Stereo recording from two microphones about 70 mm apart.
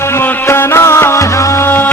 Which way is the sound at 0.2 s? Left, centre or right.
Left.